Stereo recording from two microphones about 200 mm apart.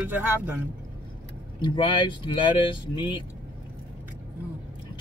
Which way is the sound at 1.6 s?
25° left (ahead or behind).